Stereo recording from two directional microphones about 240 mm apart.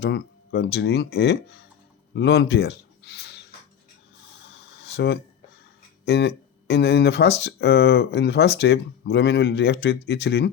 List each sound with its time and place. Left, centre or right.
0.0 s speech: left
2.1 s a sound: left
6.1 s speech: left